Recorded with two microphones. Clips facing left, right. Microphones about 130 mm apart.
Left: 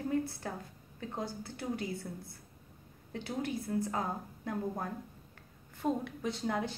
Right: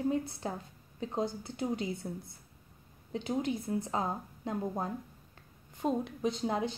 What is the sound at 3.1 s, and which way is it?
A woman's voice, 20° right (ahead or behind).